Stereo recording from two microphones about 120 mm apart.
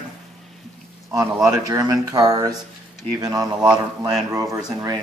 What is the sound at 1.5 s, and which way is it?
Speech, 30° right (ahead or behind).